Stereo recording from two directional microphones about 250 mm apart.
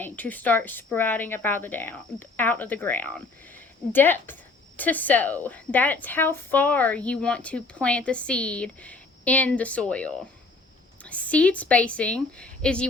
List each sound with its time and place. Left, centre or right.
0.0 s a woman's voice: centre